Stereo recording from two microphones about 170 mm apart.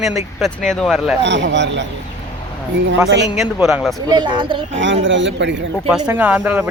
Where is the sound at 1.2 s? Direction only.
90° right.